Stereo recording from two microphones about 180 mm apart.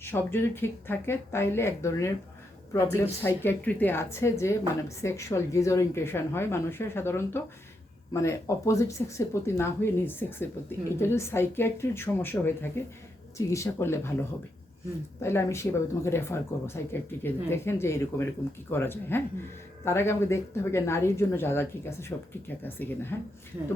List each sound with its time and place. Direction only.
0.0 s a woman's voice: 10° left (ahead or behind)
15.2 s a woman's voice: 15° left (ahead or behind)